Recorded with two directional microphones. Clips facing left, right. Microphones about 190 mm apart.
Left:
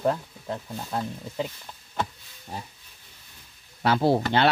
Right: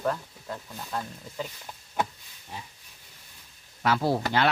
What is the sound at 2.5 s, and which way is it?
Speech, 40° left (ahead or behind).